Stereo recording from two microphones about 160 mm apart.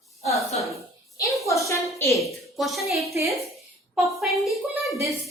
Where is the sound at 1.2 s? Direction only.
20° left (ahead or behind).